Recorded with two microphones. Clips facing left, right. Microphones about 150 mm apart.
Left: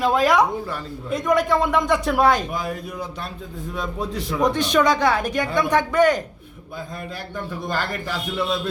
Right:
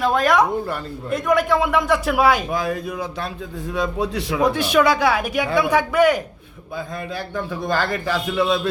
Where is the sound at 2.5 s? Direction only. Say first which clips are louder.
Right 4 dB; 90° right.